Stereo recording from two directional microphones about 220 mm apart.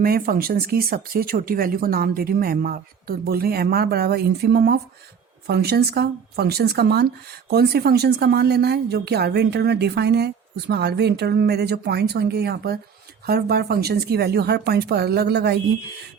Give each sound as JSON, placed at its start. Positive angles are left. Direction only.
{"t": 0.0, "sound": "speech", "side_deg": -40}